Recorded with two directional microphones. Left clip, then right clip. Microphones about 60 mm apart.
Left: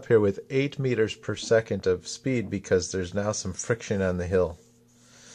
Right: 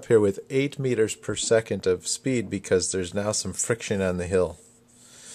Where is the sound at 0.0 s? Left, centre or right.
Right.